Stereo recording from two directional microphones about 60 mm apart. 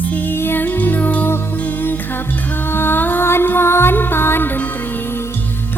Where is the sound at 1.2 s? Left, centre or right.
Left.